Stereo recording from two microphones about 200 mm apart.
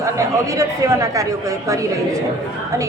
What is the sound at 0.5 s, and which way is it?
Speech, 15° right (ahead or behind).